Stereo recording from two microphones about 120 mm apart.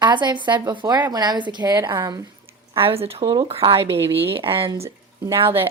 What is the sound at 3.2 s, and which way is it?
Speech, 35° right (ahead or behind).